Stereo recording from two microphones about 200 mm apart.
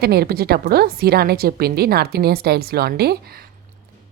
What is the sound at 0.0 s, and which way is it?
A woman's voice, 50° right (ahead or behind).